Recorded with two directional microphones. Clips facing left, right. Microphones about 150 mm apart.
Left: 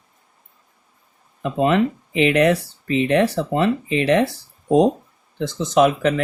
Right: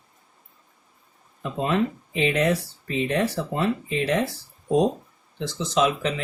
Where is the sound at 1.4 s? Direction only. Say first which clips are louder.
Left 6 dB; 75° left (ahead or behind).